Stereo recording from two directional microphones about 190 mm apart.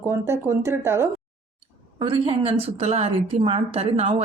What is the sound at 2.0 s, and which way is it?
A woman's voice, 25° right (ahead or behind).